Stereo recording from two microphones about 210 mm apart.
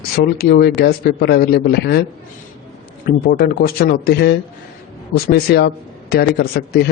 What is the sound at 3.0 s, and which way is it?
A man's voice, 45° left (ahead or behind).